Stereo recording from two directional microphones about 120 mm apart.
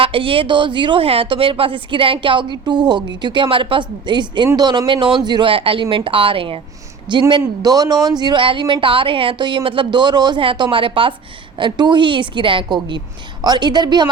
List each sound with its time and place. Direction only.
0.0 s a woman's voice: 50° right (ahead or behind)